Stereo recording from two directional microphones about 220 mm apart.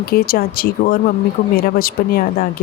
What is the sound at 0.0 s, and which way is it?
Speech, 45° left (ahead or behind).